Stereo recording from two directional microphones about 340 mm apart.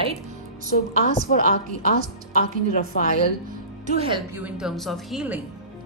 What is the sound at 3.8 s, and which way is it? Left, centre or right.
Speech, centre.